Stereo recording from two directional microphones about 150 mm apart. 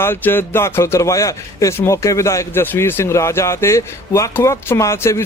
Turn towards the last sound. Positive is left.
turn(degrees=20)  # may be behind; listen again after turning